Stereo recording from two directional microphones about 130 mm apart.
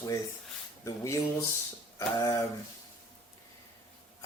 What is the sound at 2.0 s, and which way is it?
Speech, 25° left (ahead or behind).